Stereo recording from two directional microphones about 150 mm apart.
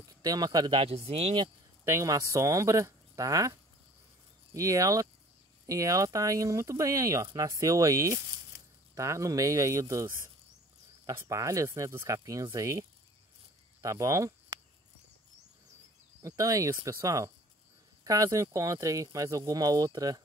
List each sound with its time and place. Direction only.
0.1 s speech: 25° right (ahead or behind)
0.7 s speech: 40° right (ahead or behind)
1.9 s speech: 20° right (ahead or behind)
4.6 s speech: 20° right (ahead or behind)
13.8 s speech: 20° right (ahead or behind)
16.2 s speech: 20° right (ahead or behind)